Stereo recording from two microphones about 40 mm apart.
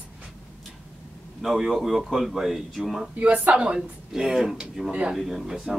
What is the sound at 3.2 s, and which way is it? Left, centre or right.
Speech, right.